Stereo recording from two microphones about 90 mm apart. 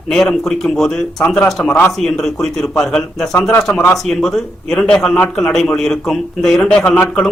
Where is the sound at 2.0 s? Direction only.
5° left (ahead or behind).